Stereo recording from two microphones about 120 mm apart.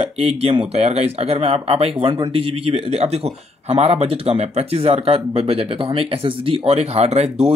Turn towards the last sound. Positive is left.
turn(degrees=-60)  # may be behind; listen again after turning